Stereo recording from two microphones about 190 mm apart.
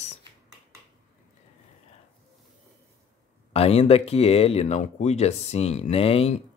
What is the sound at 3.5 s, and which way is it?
Speech, 30° left (ahead or behind).